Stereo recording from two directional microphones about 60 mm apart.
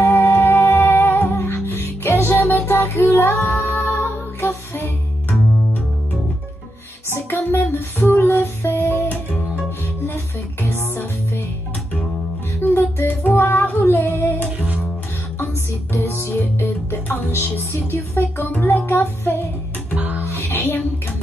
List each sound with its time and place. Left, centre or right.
0.0 s music: left
7.1 s music: left
10.6 s music: left
12.6 s music: left
15.3 s music: left
18.9 s music: left
20.4 s a sound: left